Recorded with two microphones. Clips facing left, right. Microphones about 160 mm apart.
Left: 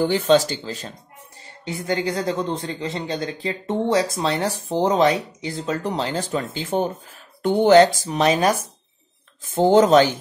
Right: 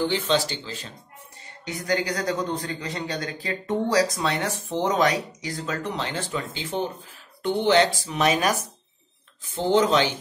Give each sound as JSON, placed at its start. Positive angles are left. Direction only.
{"t": 0.0, "sound": "speech", "side_deg": 45}
{"t": 1.6, "sound": "a man's voice", "side_deg": 25}
{"t": 5.9, "sound": "speech", "side_deg": 35}
{"t": 9.5, "sound": "speech", "side_deg": 45}